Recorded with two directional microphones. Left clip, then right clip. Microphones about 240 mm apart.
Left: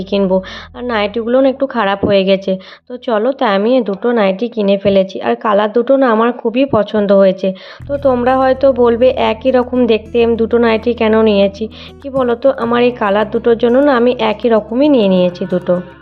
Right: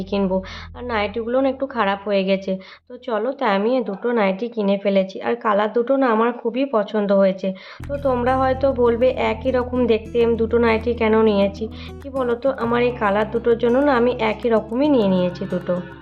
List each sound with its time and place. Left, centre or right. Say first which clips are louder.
0.0 s a woman's voice: left 8 dB; left